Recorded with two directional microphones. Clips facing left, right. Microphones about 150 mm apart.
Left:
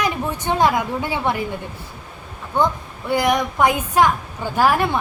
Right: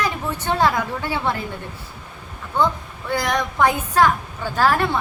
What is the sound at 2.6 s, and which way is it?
A woman's voice, 10° left (ahead or behind).